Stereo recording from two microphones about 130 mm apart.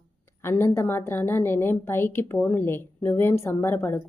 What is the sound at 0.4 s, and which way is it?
A woman's voice, 20° left (ahead or behind).